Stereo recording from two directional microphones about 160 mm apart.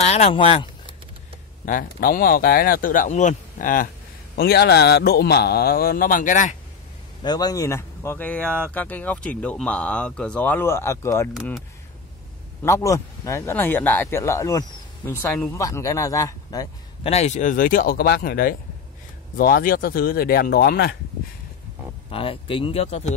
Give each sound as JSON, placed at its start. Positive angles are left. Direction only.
{"t": 0.0, "sound": "speech", "side_deg": 40}
{"t": 1.7, "sound": "speech", "side_deg": 60}
{"t": 4.4, "sound": "a man's voice", "side_deg": 85}
{"t": 7.2, "sound": "speech", "side_deg": 25}
{"t": 12.6, "sound": "speech", "side_deg": 20}
{"t": 17.0, "sound": "a man's voice", "side_deg": 45}
{"t": 22.1, "sound": "speech", "side_deg": 35}